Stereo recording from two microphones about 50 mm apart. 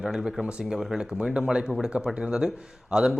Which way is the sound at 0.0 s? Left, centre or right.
Centre.